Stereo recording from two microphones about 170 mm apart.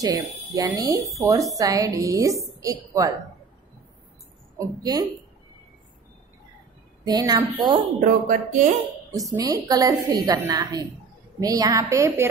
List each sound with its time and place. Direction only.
0.0 s a woman's voice: 20° right (ahead or behind)
4.6 s a woman's voice: 25° right (ahead or behind)
7.1 s a woman's voice: 25° right (ahead or behind)
8.0 s speech: 50° right (ahead or behind)
9.1 s a woman's voice: 20° right (ahead or behind)